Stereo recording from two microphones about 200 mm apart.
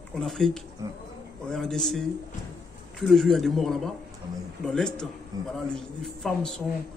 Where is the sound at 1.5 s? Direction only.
5° left (ahead or behind).